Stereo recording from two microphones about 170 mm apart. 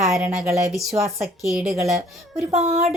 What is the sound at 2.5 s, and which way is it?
Speech, 40° right (ahead or behind).